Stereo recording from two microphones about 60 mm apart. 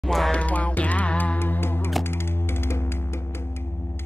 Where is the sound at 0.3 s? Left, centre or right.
Left.